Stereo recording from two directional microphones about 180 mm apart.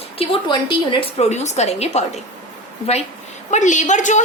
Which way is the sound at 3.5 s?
45° left (ahead or behind).